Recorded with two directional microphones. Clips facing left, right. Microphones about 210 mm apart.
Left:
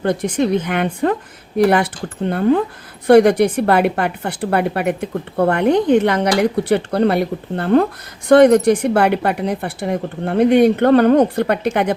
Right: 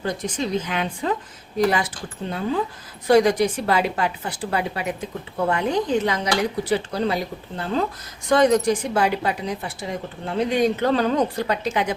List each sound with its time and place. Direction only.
0.0 s a woman's voice: 60° left (ahead or behind)